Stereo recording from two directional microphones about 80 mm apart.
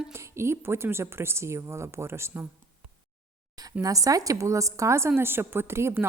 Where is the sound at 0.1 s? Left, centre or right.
Right.